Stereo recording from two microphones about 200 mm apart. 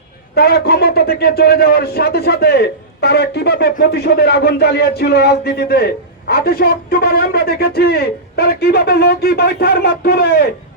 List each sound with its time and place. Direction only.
0.3 s a man's voice: 50° left (ahead or behind)